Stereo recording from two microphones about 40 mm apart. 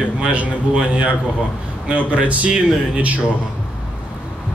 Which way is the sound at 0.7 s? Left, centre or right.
Right.